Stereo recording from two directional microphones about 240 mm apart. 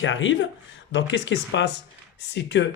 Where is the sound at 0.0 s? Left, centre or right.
Left.